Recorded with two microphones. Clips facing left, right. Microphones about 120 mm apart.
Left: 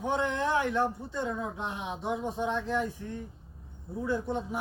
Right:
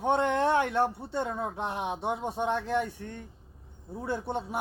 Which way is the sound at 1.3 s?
45° right (ahead or behind).